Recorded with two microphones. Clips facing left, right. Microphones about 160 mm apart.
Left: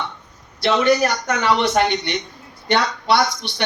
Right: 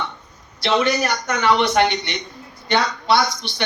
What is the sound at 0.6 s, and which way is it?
Speech, 50° left (ahead or behind).